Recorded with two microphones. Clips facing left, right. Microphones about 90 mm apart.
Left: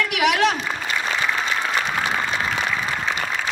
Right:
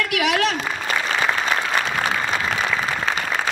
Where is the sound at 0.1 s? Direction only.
20° left (ahead or behind).